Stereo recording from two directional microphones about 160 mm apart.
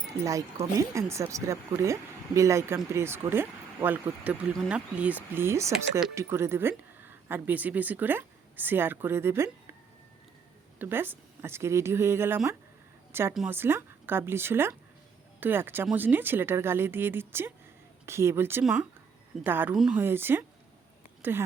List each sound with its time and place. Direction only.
0.2 s speech: 20° right (ahead or behind)
10.8 s speech: 15° right (ahead or behind)
18.6 s speech: 5° right (ahead or behind)
19.7 s speech: centre (ahead or behind)
20.0 s speech: 15° right (ahead or behind)